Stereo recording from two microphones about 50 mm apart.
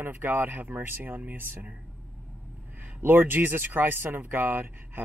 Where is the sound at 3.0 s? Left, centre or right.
Right.